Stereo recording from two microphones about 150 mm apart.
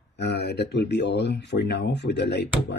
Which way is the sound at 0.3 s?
90° left.